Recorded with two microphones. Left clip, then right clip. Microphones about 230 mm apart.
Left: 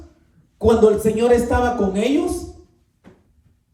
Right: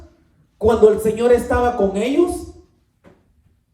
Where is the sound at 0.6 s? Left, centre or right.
Right.